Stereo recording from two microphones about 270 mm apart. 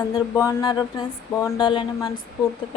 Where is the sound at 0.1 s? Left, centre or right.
Centre.